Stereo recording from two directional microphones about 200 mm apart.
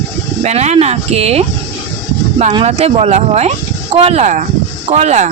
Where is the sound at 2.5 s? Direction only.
30° right (ahead or behind).